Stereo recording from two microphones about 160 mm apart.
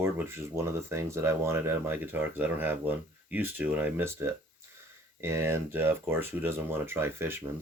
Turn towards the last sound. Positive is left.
turn(degrees=-15)  # may be behind; listen again after turning